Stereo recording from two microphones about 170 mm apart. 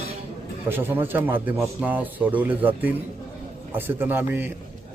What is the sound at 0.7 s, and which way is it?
Speech, 10° right (ahead or behind).